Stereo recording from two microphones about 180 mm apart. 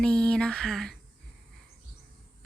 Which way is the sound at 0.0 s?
5° left (ahead or behind).